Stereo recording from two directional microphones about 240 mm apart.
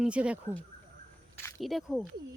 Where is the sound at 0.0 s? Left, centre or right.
Centre.